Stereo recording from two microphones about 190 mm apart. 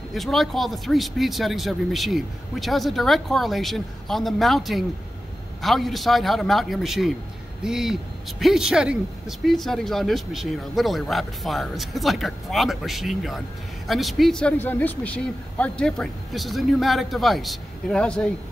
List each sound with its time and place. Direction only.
0.1 s speech: centre (ahead or behind)